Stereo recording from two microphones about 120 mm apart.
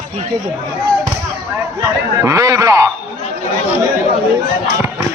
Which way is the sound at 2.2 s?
25° right (ahead or behind).